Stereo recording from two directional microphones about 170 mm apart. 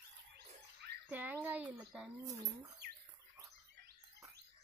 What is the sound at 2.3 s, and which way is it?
Speech, 40° right (ahead or behind).